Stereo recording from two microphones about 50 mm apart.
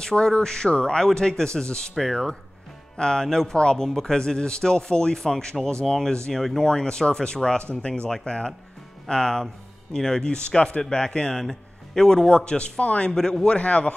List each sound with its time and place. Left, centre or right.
0.0 s a man's voice: centre
6.7 s a man's voice: centre
13.1 s a man's voice: centre
13.6 s speech: left